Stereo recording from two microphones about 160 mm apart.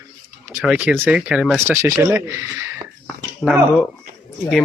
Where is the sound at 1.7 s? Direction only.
15° right (ahead or behind).